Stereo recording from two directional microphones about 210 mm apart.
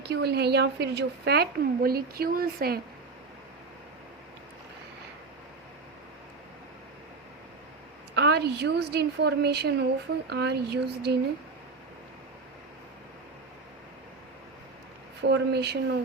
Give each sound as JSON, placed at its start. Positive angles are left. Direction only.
{"t": 0.0, "sound": "a woman's voice", "side_deg": -50}
{"t": 8.1, "sound": "a woman's voice", "side_deg": -50}
{"t": 15.2, "sound": "speech", "side_deg": -55}